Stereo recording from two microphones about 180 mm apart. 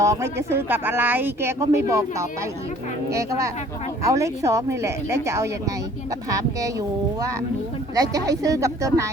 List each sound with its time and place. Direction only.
0.0 s speech: 15° right (ahead or behind)
7.9 s speech: 20° right (ahead or behind)